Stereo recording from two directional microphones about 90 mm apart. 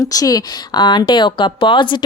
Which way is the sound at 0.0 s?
40° left (ahead or behind).